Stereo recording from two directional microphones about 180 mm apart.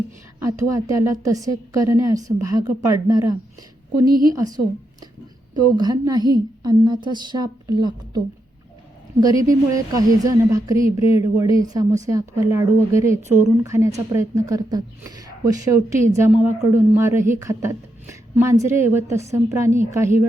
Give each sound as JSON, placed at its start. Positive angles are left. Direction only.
{"t": 0.3, "sound": "a woman's voice", "side_deg": -15}
{"t": 4.4, "sound": "a woman's voice", "side_deg": -20}
{"t": 9.2, "sound": "a woman's voice", "side_deg": -20}